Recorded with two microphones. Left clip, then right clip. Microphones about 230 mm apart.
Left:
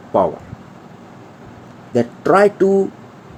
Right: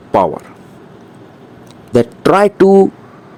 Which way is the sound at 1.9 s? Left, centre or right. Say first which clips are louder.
Right 4 dB; right.